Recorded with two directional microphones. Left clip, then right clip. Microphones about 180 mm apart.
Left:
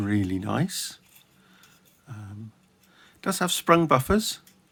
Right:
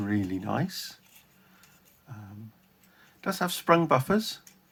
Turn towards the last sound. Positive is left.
turn(degrees=35)  # may be behind; listen again after turning